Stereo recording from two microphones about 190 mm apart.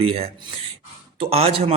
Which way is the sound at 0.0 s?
30° right (ahead or behind).